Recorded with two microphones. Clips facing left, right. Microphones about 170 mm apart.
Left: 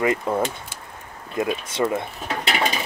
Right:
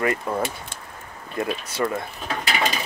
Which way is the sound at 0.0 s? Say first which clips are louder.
Left 2 dB; 20° left (ahead or behind).